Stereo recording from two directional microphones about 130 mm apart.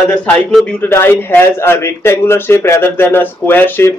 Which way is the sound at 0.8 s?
15° left (ahead or behind).